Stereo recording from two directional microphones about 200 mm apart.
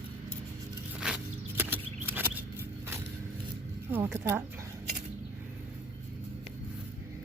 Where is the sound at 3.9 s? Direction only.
10° right (ahead or behind).